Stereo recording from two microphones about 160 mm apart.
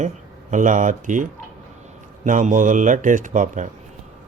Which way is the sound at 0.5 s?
55° right (ahead or behind).